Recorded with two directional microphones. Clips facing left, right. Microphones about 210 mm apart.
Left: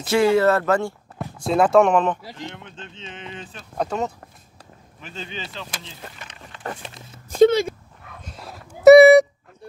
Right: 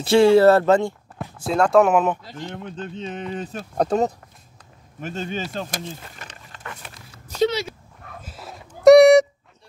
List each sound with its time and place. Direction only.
0.0 s speech: 30° right (ahead or behind)
1.1 s speech: centre (ahead or behind)
2.5 s speech: 40° right (ahead or behind)
6.8 s speech: 25° left (ahead or behind)
7.2 s speech: 50° left (ahead or behind)
8.2 s a sound: 5° right (ahead or behind)